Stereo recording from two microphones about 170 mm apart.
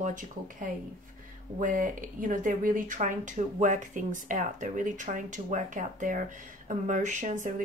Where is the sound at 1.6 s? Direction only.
50° right (ahead or behind).